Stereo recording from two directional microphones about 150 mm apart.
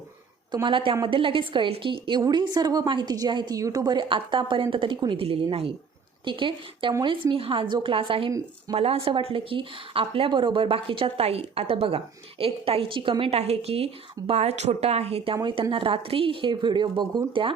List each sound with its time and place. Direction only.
0.5 s speech: 35° right (ahead or behind)
15.4 s speech: 25° right (ahead or behind)